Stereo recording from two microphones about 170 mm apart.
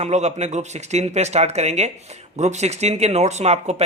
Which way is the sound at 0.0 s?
40° right (ahead or behind).